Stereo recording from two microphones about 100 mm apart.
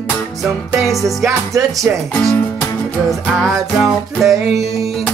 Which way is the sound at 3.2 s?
5° left (ahead or behind).